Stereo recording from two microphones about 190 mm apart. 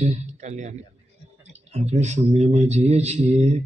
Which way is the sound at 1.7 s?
35° right (ahead or behind).